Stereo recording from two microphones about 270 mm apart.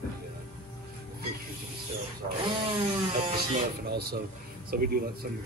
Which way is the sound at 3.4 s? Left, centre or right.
Right.